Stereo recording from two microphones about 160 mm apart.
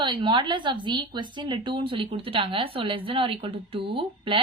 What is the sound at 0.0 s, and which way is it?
A woman's voice, 30° right (ahead or behind).